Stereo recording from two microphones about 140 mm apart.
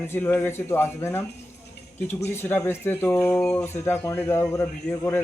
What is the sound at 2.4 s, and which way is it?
Speech, 15° left (ahead or behind).